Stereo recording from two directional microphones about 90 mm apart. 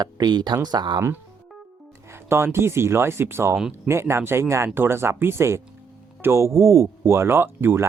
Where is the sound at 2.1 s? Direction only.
30° right (ahead or behind).